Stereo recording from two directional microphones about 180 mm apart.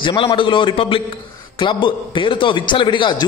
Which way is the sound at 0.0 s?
30° left (ahead or behind).